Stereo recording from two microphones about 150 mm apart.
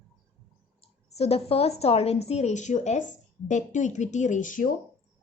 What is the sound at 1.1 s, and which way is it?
A woman's voice, 45° left (ahead or behind).